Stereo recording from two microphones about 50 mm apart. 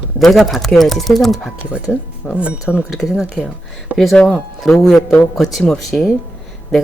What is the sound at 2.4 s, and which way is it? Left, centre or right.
Speech, right.